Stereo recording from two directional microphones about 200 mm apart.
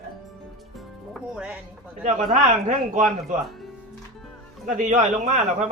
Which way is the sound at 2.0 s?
40° right (ahead or behind).